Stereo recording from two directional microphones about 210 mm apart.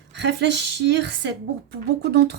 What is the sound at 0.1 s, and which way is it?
A woman's voice, 55° right (ahead or behind).